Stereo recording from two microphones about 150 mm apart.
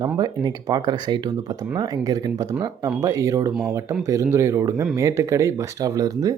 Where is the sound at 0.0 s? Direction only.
25° right (ahead or behind).